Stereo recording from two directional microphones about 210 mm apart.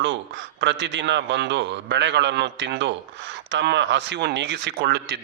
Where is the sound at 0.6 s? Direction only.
60° right (ahead or behind).